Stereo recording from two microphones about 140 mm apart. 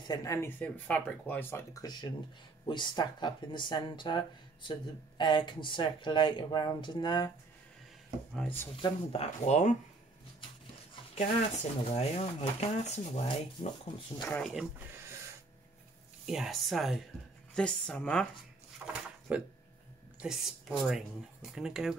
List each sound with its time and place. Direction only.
0.0 s speech: 25° left (ahead or behind)
8.8 s speech: 45° left (ahead or behind)
11.1 s speech: 50° left (ahead or behind)
13.6 s speech: 35° left (ahead or behind)
14.3 s speech: centre (ahead or behind)
16.3 s speech: centre (ahead or behind)